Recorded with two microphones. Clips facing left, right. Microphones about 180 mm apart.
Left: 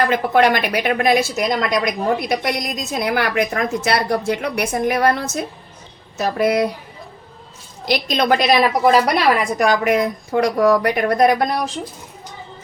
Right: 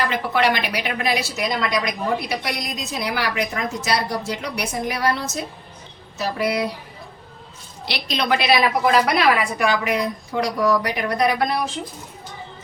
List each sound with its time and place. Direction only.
0.0 s a woman's voice: 50° left (ahead or behind)
7.9 s a woman's voice: 45° left (ahead or behind)